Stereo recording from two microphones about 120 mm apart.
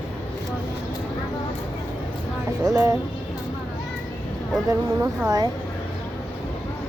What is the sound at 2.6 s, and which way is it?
Speech, 25° right (ahead or behind).